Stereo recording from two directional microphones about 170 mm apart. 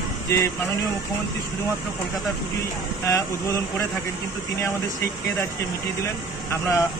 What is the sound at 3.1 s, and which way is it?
Speech, 15° left (ahead or behind).